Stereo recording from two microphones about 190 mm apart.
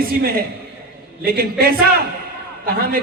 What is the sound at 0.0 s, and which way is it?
A man's voice, 50° right (ahead or behind).